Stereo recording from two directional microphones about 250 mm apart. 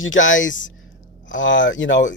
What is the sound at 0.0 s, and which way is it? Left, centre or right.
Speech, left.